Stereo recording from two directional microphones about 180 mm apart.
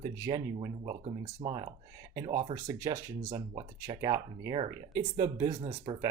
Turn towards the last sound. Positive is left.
turn(degrees=-30)  # may be behind; listen again after turning